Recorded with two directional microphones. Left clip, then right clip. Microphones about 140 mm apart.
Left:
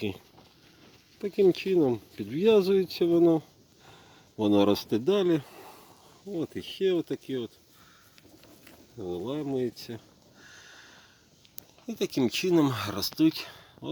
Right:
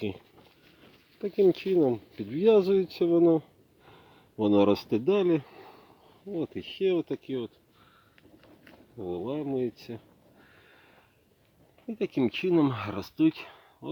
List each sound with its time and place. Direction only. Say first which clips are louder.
1.2 s speech: even; centre (ahead or behind)
5.5 s a sound: left 2 dB; 20° left (ahead or behind)
6.3 s speech: even; 5° left (ahead or behind)
9.0 s speech: even; 15° left (ahead or behind)
11.9 s speech: left 1 dB; 5° right (ahead or behind)